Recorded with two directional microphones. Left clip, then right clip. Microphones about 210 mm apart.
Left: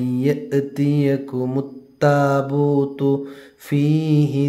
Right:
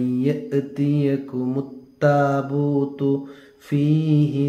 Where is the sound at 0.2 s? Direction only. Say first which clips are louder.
Left 6 dB; 45° left (ahead or behind).